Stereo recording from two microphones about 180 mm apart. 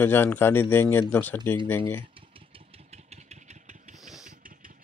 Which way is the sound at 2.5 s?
35° right (ahead or behind).